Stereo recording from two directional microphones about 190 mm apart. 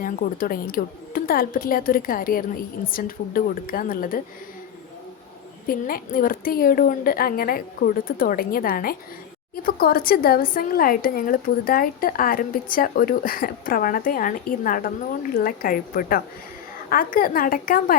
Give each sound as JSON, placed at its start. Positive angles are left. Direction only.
{"t": 0.0, "sound": "a woman's voice", "side_deg": 50}
{"t": 5.6, "sound": "a woman's voice", "side_deg": 45}